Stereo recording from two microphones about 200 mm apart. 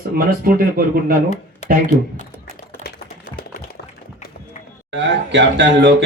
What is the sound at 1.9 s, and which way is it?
Speech, 35° left (ahead or behind).